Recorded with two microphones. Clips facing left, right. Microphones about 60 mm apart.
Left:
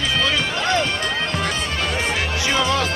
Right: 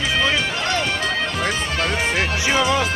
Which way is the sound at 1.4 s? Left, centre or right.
Centre.